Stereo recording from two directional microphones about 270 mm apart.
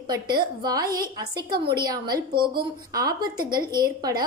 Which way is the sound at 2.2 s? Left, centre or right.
Right.